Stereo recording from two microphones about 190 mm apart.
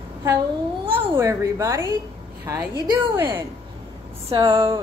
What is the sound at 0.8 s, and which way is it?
A woman's voice, 15° right (ahead or behind).